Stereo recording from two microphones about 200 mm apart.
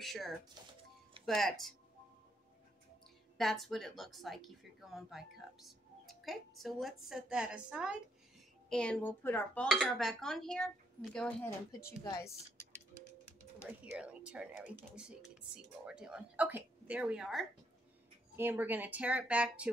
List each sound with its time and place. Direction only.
0.0 s speech: centre (ahead or behind)
3.3 s speech: centre (ahead or behind)
12.0 s speech: 15° left (ahead or behind)
13.7 s speech: 5° right (ahead or behind)